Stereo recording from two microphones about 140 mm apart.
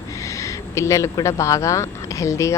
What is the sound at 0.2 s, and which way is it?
Speech, 20° left (ahead or behind).